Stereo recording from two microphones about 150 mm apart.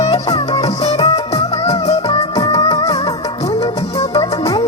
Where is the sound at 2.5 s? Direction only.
25° left (ahead or behind).